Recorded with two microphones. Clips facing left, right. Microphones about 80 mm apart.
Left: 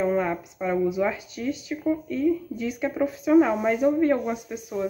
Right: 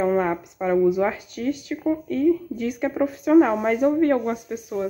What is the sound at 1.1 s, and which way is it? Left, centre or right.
A woman's voice, right.